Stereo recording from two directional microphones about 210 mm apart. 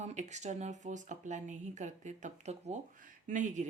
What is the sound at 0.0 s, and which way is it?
Speech, 35° right (ahead or behind).